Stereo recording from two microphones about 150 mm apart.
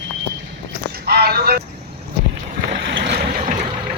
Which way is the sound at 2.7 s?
70° right (ahead or behind).